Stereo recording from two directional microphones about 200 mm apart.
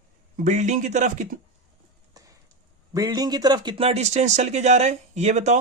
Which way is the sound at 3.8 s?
30° right (ahead or behind).